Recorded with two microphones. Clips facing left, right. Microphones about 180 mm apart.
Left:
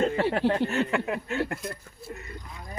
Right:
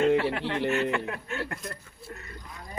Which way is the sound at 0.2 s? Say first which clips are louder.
Left 4 dB; 40° left (ahead or behind).